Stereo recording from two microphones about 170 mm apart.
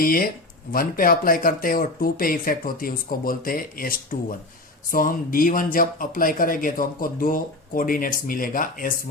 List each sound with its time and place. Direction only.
0.0 s speech: 60° left (ahead or behind)